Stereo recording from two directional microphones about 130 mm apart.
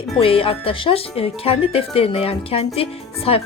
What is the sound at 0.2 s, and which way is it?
Speech, 45° left (ahead or behind).